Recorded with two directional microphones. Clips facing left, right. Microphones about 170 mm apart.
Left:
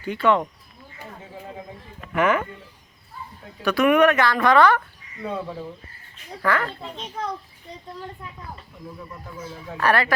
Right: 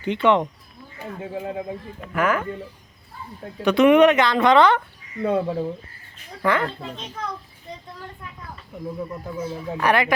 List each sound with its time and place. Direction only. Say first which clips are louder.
0.0 s speech: right 2 dB; 20° right (ahead or behind)
2.1 s speech: left 1 dB; centre (ahead or behind)
3.6 s speech: right 3 dB; 20° right (ahead or behind)
5.2 s speech: right 8 dB; 50° right (ahead or behind)
6.4 s speech: right 2 dB; 20° right (ahead or behind)
9.7 s speech: right 1 dB; 15° right (ahead or behind)